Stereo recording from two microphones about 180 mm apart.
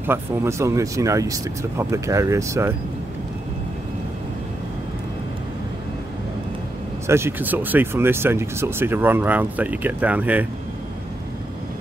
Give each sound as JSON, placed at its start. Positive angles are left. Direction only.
{"t": 0.0, "sound": "speech", "side_deg": -15}
{"t": 7.1, "sound": "speech", "side_deg": -15}